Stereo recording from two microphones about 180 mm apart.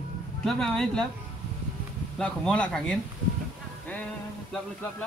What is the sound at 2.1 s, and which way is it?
Speech, 5° left (ahead or behind).